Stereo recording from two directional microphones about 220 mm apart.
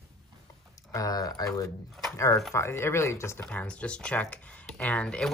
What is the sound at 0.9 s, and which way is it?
Speech, 15° left (ahead or behind).